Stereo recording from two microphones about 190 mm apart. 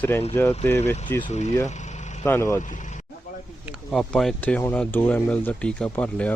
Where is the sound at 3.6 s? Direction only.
Centre (ahead or behind).